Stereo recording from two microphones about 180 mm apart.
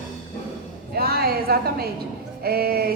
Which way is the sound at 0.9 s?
60° right (ahead or behind).